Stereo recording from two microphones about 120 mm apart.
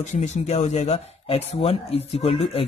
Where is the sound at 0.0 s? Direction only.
80° left.